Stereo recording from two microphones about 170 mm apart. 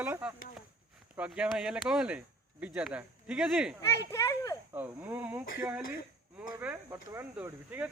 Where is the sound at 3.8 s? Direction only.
20° left (ahead or behind).